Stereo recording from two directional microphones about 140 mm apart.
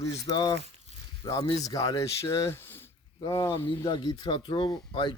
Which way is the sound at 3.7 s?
35° left (ahead or behind).